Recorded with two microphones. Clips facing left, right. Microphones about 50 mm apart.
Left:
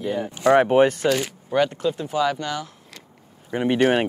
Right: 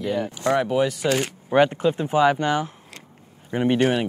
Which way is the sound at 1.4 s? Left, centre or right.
Right.